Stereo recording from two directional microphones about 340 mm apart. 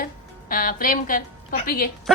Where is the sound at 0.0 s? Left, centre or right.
Left.